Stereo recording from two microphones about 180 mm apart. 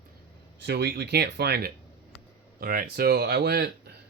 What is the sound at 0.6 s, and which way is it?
Speech, 65° right (ahead or behind).